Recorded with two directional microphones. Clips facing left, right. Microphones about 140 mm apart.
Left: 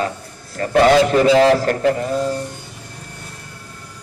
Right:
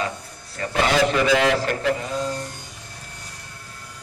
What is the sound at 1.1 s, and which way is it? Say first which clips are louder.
Speech: left 7 dB; 35° left (ahead or behind).